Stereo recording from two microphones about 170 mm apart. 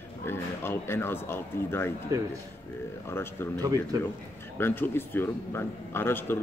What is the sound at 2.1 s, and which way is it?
Speech, 20° right (ahead or behind).